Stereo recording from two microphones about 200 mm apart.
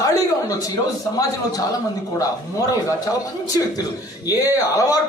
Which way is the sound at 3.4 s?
20° left (ahead or behind).